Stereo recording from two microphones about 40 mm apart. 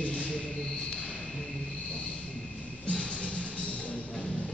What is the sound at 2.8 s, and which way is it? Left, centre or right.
Music, left.